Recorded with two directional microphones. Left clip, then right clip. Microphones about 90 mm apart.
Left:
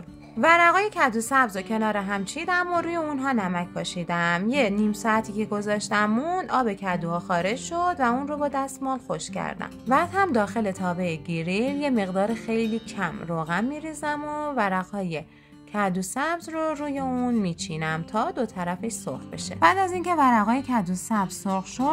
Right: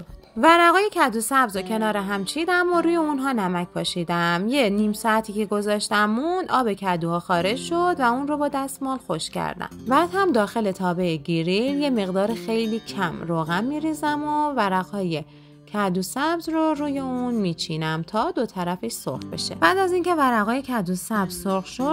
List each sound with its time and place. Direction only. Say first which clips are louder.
0.4 s speech: right 2 dB; 30° right (ahead or behind)
6.0 s speech: right 2 dB; 15° right (ahead or behind)
6.3 s a woman's voice: right 2 dB; 35° right (ahead or behind)
17.1 s speech: right 1 dB; 15° right (ahead or behind)
17.5 s speech: right 2 dB; 35° right (ahead or behind)
19.6 s a woman's voice: right 1 dB; 20° right (ahead or behind)